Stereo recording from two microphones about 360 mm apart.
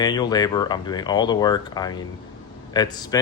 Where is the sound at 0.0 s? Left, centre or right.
Centre.